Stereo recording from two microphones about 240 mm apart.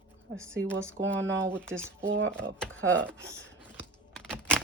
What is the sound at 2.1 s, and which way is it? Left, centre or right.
Speech, right.